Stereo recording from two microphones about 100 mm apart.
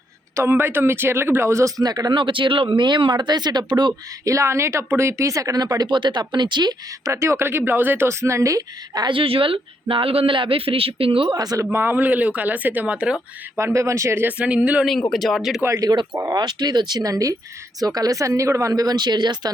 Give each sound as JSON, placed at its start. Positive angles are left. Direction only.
{"t": 0.3, "sound": "speech", "side_deg": -20}
{"t": 1.8, "sound": "speech", "side_deg": -40}
{"t": 4.3, "sound": "speech", "side_deg": -30}
{"t": 7.0, "sound": "speech", "side_deg": -30}
{"t": 9.0, "sound": "speech", "side_deg": -65}
{"t": 11.3, "sound": "speech", "side_deg": -40}
{"t": 11.6, "sound": "speech", "side_deg": -25}
{"t": 13.6, "sound": "speech", "side_deg": -30}
{"t": 15.1, "sound": "speech", "side_deg": 0}
{"t": 15.8, "sound": "speech", "side_deg": -40}